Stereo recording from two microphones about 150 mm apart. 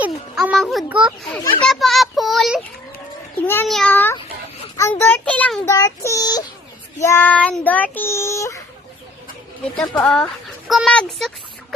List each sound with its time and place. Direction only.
0.0 s music: 10° right (ahead or behind)
0.5 s a child's voice: centre (ahead or behind)
1.6 s child singing: centre (ahead or behind)
3.4 s speech: 15° left (ahead or behind)
3.7 s speech: centre (ahead or behind)
3.9 s speech: 15° left (ahead or behind)
5.7 s speech: 20° left (ahead or behind)
7.0 s speech: 15° left (ahead or behind)
9.9 s speech: 5° left (ahead or behind)